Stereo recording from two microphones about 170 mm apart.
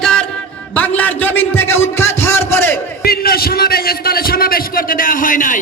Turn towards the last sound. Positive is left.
turn(degrees=50)  # may be behind; listen again after turning